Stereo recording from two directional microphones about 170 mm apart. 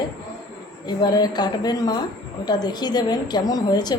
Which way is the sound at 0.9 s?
25° left (ahead or behind).